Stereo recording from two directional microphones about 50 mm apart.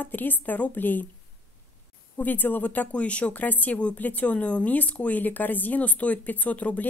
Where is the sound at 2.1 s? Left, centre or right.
Left.